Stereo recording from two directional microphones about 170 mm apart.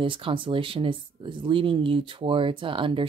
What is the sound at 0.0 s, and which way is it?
Speech, 30° right (ahead or behind).